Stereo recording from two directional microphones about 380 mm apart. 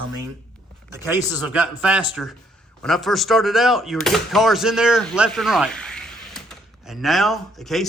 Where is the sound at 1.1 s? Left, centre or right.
Centre.